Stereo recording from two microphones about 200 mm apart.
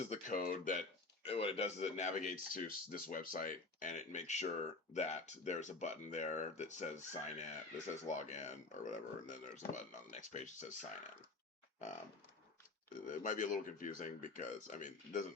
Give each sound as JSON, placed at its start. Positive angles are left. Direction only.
{"t": 0.0, "sound": "speech", "side_deg": 40}
{"t": 1.2, "sound": "speech", "side_deg": 30}
{"t": 12.9, "sound": "speech", "side_deg": 40}